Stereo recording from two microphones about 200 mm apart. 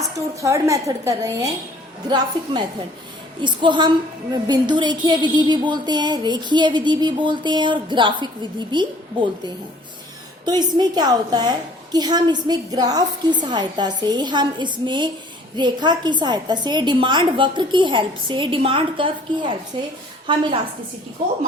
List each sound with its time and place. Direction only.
0.0 s a woman's voice: 15° right (ahead or behind)